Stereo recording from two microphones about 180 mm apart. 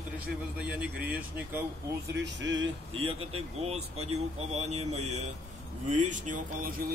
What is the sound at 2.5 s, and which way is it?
Speech, 30° right (ahead or behind).